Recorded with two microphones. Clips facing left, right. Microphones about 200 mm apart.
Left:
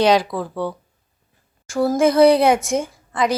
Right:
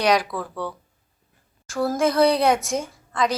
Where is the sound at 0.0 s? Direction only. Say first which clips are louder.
Left 5 dB; 25° left (ahead or behind).